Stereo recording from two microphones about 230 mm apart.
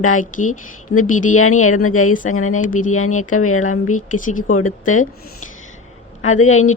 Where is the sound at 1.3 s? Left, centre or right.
Left.